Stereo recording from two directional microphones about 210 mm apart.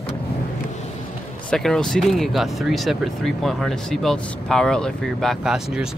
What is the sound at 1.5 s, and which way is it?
Speech, 5° left (ahead or behind).